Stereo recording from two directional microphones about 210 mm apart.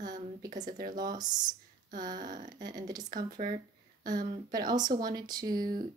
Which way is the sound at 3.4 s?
40° right (ahead or behind).